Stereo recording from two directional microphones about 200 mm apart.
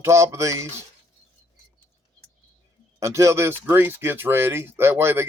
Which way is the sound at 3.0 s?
15° right (ahead or behind).